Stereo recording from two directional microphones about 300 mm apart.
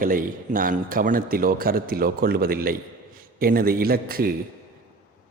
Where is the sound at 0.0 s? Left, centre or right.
Right.